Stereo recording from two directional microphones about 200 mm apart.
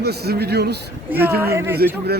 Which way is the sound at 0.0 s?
55° right (ahead or behind).